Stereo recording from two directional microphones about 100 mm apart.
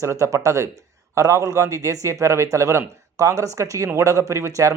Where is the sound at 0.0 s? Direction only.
30° right (ahead or behind).